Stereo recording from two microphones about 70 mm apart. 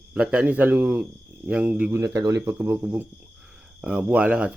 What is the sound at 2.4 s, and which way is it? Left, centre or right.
Speech, right.